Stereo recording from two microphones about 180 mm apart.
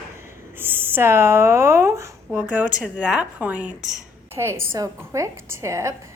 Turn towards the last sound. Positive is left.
turn(degrees=-15)  # may be behind; listen again after turning